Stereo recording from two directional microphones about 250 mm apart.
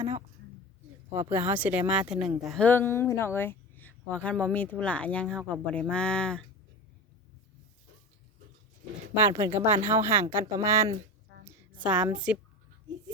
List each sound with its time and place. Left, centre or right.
1.3 s speech: centre
9.1 s speech: centre
11.3 s a sound: right
11.8 s speech: centre